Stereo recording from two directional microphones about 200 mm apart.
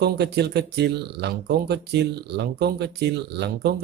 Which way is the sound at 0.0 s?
55° right (ahead or behind).